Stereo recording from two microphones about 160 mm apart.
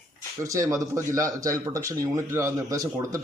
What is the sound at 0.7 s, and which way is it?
A man's voice, 20° right (ahead or behind).